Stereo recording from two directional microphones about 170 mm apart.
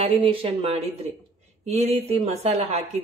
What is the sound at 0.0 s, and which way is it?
A woman's voice, 30° right (ahead or behind).